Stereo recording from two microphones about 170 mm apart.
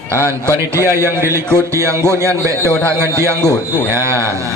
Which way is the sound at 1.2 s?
15° right (ahead or behind).